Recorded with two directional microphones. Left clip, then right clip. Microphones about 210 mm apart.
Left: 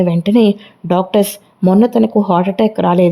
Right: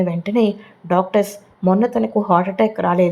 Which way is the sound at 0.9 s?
30° left (ahead or behind).